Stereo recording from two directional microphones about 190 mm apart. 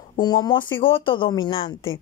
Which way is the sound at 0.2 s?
20° left (ahead or behind).